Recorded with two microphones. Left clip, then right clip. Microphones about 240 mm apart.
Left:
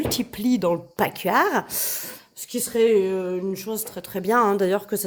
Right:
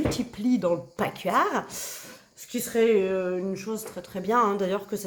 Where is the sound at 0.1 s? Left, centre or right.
Left.